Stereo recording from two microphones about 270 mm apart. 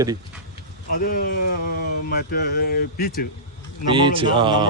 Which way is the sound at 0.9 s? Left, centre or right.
Left.